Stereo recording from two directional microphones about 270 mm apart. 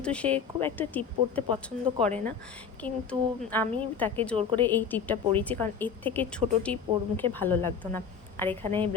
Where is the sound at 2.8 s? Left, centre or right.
Centre.